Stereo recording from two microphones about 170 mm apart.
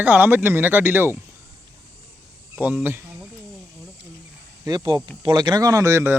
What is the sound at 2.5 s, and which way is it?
Speech, 10° right (ahead or behind).